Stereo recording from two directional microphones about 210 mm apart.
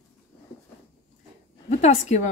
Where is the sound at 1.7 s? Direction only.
30° left (ahead or behind).